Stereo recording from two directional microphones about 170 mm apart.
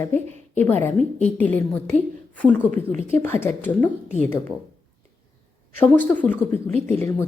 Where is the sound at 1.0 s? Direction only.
40° left (ahead or behind).